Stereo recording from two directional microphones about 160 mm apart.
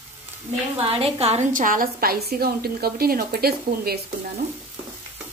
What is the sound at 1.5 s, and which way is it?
A woman's voice, 55° right (ahead or behind).